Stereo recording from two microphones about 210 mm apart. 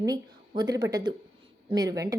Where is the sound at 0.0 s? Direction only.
20° right (ahead or behind).